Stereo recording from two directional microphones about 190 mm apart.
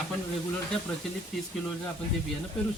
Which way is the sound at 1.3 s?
Centre (ahead or behind).